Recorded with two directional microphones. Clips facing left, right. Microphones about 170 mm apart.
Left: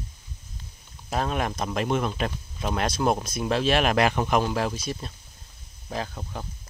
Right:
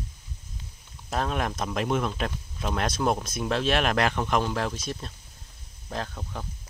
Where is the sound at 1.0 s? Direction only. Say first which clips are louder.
Left 1 dB; centre (ahead or behind).